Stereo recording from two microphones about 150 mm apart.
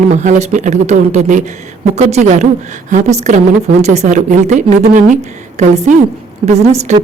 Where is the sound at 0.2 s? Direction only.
50° right (ahead or behind).